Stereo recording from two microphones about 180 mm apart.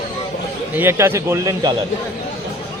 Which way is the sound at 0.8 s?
15° right (ahead or behind).